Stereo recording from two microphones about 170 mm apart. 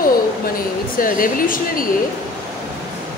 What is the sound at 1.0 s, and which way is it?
Speech, 55° left (ahead or behind).